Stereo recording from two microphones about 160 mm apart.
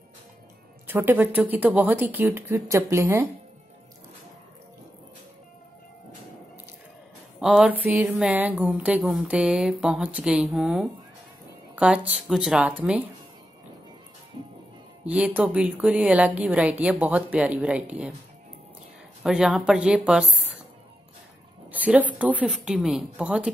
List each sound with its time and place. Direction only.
0.8 s speech: 10° right (ahead or behind)
7.3 s speech: 5° right (ahead or behind)
14.4 s music: 35° right (ahead or behind)
15.0 s speech: 5° right (ahead or behind)
19.2 s speech: 5° right (ahead or behind)
21.7 s speech: 10° right (ahead or behind)